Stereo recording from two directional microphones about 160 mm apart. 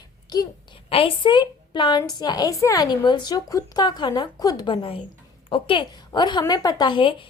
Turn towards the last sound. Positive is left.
turn(degrees=30)  # may be behind; listen again after turning